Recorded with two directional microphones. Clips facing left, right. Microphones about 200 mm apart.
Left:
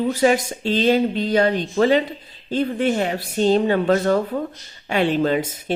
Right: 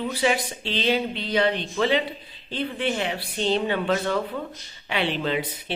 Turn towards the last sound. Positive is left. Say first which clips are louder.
# left 7 dB
turn(degrees=45)  # may be behind; listen again after turning